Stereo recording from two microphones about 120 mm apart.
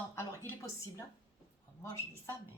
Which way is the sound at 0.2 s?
20° left (ahead or behind).